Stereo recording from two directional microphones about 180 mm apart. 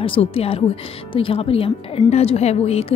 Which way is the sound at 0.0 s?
30° left (ahead or behind).